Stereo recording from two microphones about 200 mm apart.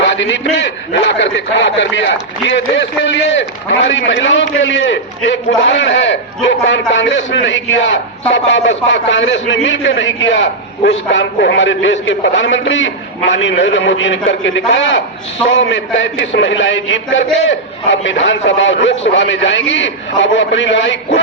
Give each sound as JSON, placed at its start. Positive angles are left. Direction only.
{"t": 0.0, "sound": "a man's voice", "side_deg": 65}